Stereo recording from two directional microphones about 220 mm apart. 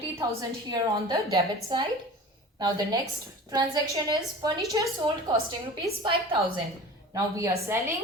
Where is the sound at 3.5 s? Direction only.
15° right (ahead or behind).